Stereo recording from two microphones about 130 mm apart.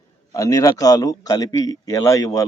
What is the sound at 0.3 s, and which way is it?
Speech, 25° left (ahead or behind).